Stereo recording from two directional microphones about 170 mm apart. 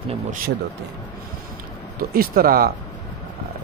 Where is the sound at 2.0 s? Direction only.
60° right (ahead or behind).